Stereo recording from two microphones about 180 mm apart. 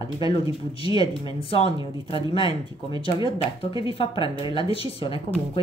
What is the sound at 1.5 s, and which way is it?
Speech, 30° left (ahead or behind).